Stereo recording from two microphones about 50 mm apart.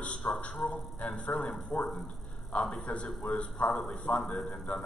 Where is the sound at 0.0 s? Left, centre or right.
Left.